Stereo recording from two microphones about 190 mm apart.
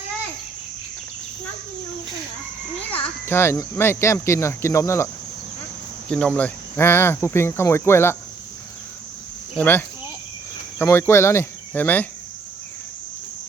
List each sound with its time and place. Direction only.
2.9 s speech: 10° left (ahead or behind)
6.1 s speech: 5° left (ahead or behind)
9.6 s speech: 10° left (ahead or behind)
10.8 s cricket: 15° left (ahead or behind)